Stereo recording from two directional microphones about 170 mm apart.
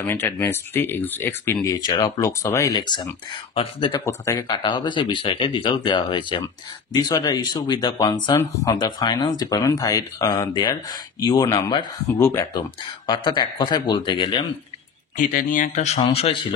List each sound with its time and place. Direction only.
0.0 s speech: 15° left (ahead or behind)
15.1 s speech: 50° left (ahead or behind)